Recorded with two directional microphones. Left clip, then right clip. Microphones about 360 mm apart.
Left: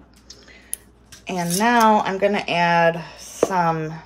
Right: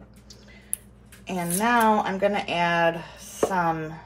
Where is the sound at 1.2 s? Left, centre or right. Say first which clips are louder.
Left 5 dB; left.